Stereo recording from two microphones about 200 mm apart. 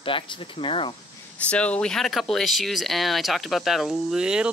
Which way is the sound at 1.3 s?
5° left (ahead or behind).